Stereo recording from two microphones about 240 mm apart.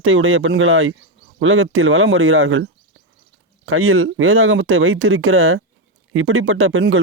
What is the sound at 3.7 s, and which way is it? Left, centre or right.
Speech, right.